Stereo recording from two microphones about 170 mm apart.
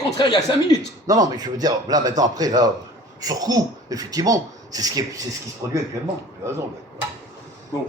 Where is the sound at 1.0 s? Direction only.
20° right (ahead or behind).